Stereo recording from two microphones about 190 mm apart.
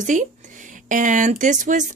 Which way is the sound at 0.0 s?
40° right (ahead or behind).